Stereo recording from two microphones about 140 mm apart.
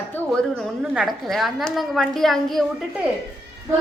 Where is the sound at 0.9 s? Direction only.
Centre (ahead or behind).